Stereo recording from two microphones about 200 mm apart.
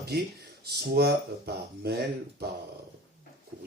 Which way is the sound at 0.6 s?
55° right (ahead or behind).